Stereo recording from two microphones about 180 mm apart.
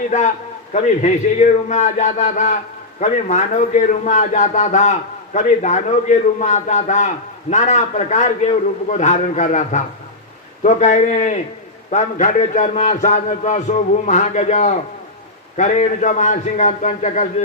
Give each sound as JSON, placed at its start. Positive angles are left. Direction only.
{"t": 0.1, "sound": "a man's voice", "side_deg": 40}